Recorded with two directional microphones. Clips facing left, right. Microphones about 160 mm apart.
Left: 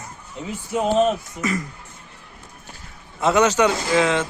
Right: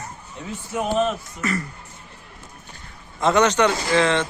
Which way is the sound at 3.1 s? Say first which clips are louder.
Even; 10° left (ahead or behind).